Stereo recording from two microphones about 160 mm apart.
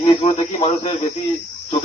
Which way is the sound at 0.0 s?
35° left (ahead or behind).